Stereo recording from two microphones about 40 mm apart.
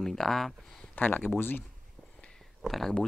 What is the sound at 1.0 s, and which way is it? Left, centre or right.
Speech, left.